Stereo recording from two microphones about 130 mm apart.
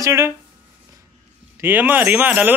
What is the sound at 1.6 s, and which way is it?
Speech, 15° right (ahead or behind).